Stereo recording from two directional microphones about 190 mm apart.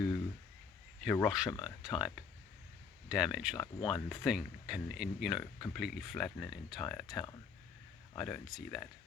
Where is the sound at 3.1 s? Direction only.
5° right (ahead or behind).